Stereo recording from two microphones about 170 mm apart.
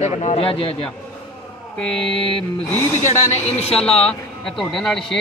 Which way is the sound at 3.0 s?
40° left (ahead or behind).